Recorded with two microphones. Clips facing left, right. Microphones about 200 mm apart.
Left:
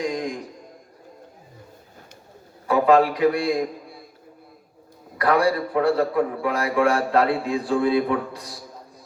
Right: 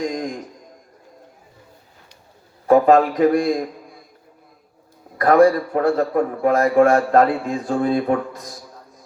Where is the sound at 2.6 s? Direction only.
45° right (ahead or behind).